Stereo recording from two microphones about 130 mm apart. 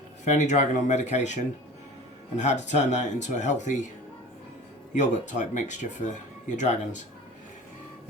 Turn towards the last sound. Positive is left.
turn(degrees=70)  # may be behind; listen again after turning